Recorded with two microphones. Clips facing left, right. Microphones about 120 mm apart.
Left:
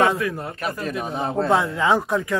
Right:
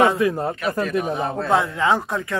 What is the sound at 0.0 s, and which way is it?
Speech, 20° right (ahead or behind).